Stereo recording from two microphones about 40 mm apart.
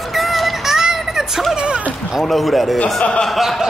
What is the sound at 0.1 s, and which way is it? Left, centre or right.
Music, centre.